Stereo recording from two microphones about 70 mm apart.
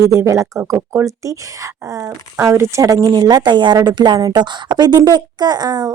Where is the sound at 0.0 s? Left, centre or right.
Right.